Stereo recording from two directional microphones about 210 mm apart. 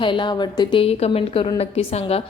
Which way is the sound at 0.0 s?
25° left (ahead or behind).